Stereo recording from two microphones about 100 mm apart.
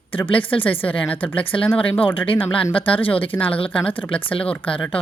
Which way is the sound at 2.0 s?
60° left (ahead or behind).